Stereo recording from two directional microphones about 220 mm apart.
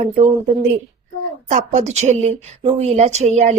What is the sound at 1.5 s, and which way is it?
A woman's voice, 35° right (ahead or behind).